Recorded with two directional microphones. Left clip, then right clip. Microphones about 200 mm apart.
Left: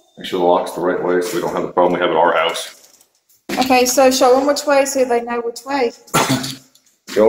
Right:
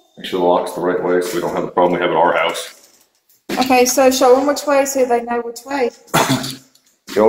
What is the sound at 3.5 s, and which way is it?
A woman's voice, centre (ahead or behind).